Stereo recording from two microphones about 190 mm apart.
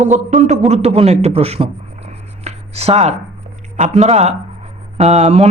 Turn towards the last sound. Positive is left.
turn(degrees=-35)  # may be behind; listen again after turning